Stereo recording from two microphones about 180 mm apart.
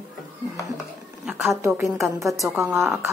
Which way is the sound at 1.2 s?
5° right (ahead or behind).